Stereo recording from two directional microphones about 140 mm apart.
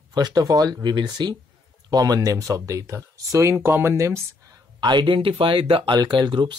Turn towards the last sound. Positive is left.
turn(degrees=-35)  # may be behind; listen again after turning